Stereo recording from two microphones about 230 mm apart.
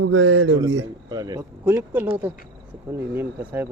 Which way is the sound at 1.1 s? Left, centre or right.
Centre.